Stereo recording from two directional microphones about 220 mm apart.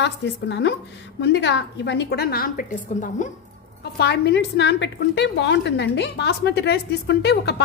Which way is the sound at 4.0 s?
50° left (ahead or behind).